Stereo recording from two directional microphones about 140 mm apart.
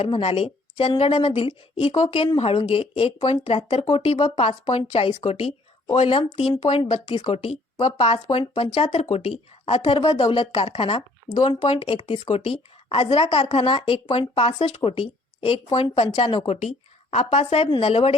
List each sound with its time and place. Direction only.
0.1 s a woman's voice: 45° left (ahead or behind)
11.7 s a woman's voice: 45° left (ahead or behind)
16.6 s a woman's voice: 50° left (ahead or behind)